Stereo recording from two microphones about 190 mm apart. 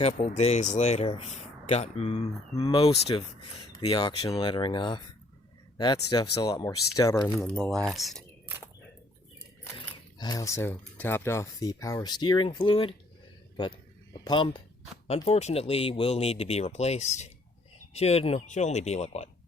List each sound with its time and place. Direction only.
0.0 s speech: 35° left (ahead or behind)
7.3 s speech: centre (ahead or behind)
9.7 s speech: 20° left (ahead or behind)
13.6 s a sound: 25° left (ahead or behind)
15.0 s speech: 30° left (ahead or behind)